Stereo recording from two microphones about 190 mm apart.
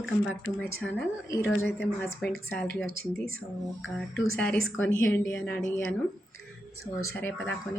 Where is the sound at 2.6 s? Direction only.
50° right (ahead or behind).